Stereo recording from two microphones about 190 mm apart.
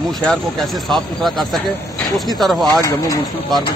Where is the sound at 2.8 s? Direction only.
20° left (ahead or behind).